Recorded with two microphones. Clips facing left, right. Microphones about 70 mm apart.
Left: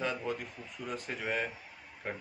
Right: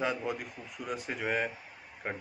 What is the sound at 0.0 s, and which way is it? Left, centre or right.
Speech, centre.